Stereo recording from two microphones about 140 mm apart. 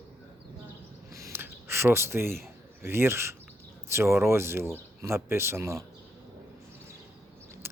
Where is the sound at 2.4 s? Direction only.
15° right (ahead or behind).